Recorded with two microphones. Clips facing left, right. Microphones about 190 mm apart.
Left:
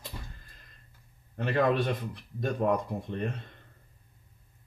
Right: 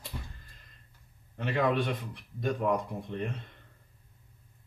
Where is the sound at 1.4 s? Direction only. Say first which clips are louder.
Left 2 dB; 40° left (ahead or behind).